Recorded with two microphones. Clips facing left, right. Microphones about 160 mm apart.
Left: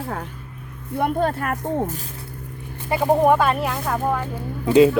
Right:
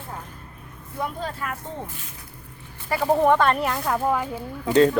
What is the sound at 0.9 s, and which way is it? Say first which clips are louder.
Speech: left 9 dB; 60° left (ahead or behind).